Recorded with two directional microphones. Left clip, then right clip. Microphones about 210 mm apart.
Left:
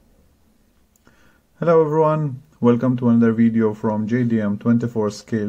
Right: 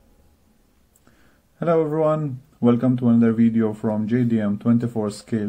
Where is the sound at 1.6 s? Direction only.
15° left (ahead or behind).